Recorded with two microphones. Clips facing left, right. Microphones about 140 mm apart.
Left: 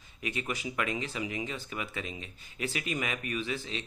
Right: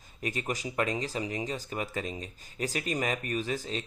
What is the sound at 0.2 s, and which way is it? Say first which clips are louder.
Speech: right 2 dB; 40° right (ahead or behind).